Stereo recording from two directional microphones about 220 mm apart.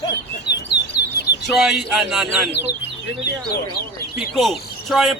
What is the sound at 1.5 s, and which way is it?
Speech, centre (ahead or behind).